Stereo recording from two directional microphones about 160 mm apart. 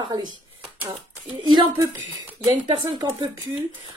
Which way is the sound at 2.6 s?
25° right (ahead or behind).